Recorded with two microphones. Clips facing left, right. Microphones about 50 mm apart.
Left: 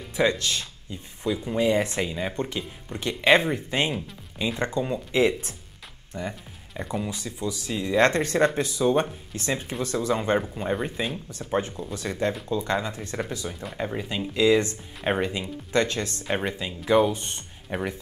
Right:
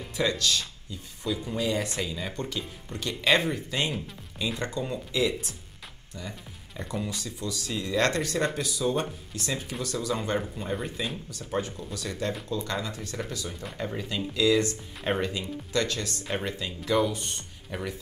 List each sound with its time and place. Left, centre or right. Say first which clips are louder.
0.1 s speech: left 3 dB; left
5.1 s speech: left 6 dB; left
6.8 s speech: left 3 dB; centre